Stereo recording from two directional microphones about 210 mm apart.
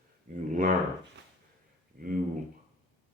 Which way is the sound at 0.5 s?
40° right (ahead or behind).